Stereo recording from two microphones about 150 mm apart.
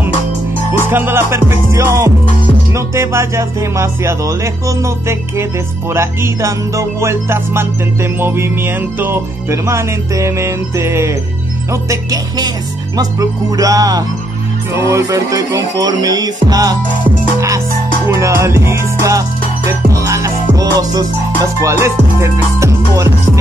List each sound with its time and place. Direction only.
0.8 s music: 15° right (ahead or behind)